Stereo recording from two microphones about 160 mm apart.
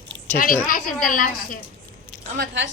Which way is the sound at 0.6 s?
60° left (ahead or behind).